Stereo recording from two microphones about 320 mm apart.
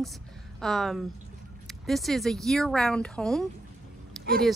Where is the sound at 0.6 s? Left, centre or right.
Centre.